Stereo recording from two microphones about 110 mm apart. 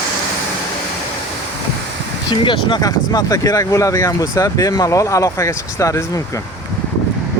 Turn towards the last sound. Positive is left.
turn(degrees=30)  # may be behind; listen again after turning